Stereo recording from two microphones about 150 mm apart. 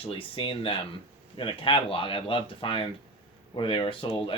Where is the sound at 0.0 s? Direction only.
35° left (ahead or behind).